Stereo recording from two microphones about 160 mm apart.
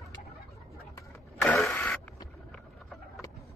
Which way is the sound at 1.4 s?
5° left (ahead or behind).